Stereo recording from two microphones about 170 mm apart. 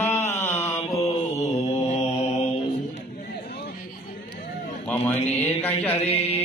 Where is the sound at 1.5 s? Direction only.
40° left (ahead or behind).